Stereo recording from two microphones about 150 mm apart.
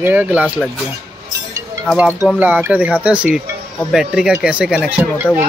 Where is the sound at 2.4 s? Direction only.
10° right (ahead or behind).